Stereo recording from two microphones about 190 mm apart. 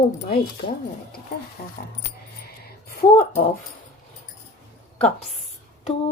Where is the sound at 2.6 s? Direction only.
50° left (ahead or behind).